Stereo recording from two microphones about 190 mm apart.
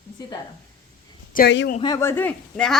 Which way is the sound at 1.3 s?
45° left (ahead or behind).